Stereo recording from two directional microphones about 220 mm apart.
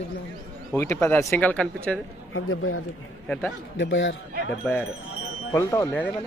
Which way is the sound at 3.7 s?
55° left (ahead or behind).